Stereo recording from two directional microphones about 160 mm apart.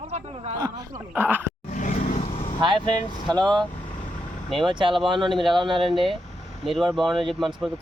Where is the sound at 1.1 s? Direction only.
10° right (ahead or behind).